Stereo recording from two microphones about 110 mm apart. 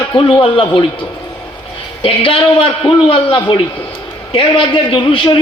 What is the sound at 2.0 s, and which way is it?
A man's voice, 55° left (ahead or behind).